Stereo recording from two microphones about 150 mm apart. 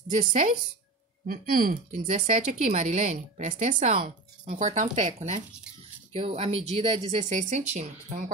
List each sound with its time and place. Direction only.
0.1 s speech: 55° right (ahead or behind)
1.2 s speech: 75° right (ahead or behind)
1.9 s speech: 55° right (ahead or behind)
6.1 s speech: 40° right (ahead or behind)